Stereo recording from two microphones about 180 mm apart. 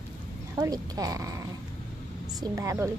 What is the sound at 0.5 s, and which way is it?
Speech, 20° right (ahead or behind).